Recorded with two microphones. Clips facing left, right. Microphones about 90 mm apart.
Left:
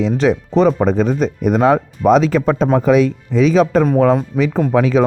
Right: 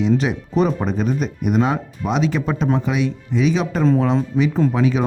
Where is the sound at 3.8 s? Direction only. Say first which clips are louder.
Left 4 dB; 55° left (ahead or behind).